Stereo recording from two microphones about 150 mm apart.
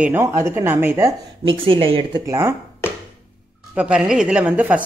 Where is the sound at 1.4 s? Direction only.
35° right (ahead or behind).